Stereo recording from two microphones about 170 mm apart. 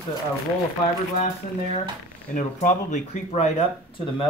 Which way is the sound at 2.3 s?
45° left (ahead or behind).